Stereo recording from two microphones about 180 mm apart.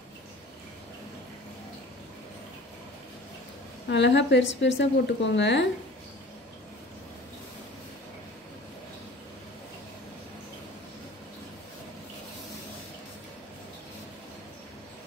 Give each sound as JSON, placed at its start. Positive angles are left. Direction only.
{"t": 3.9, "sound": "a woman's voice", "side_deg": 75}